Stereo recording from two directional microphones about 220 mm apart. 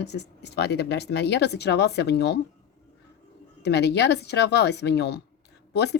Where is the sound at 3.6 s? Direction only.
50° left (ahead or behind).